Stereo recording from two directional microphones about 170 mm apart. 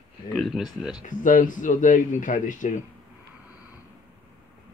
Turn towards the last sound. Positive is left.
turn(degrees=50)  # may be behind; listen again after turning